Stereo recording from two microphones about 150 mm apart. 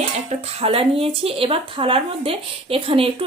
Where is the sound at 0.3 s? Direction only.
40° right (ahead or behind).